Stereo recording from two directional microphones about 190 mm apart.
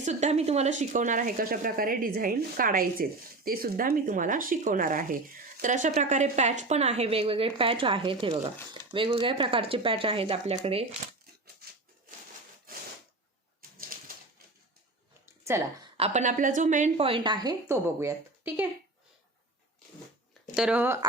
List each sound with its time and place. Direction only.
0.0 s a woman's voice: 40° right (ahead or behind)
13.6 s a sound: 50° right (ahead or behind)
16.0 s a woman's voice: 35° right (ahead or behind); by 18.6 s 10° right (ahead or behind)
20.6 s speech: 5° right (ahead or behind)